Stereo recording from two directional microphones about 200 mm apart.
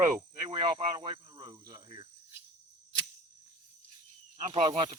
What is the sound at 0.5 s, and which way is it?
Speech, 25° right (ahead or behind).